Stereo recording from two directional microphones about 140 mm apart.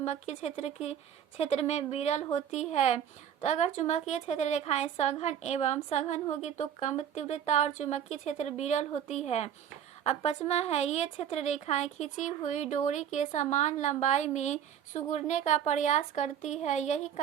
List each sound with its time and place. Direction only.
0.0 s a woman's voice: 50° left (ahead or behind)